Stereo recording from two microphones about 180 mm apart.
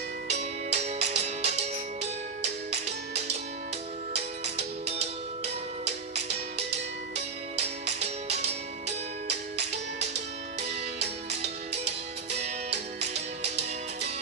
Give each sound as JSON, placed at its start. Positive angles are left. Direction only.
{"t": 0.3, "sound": "music", "side_deg": -40}
{"t": 7.8, "sound": "music", "side_deg": -40}